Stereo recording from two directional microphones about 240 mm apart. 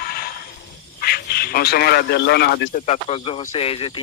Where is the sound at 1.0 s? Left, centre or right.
Left.